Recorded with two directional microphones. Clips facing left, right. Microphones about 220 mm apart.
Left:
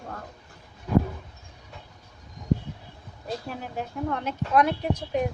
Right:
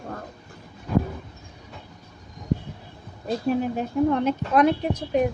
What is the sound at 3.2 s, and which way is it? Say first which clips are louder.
Speech: right 11 dB; 20° right (ahead or behind).